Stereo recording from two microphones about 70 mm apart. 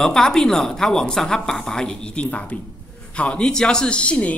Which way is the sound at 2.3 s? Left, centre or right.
Left.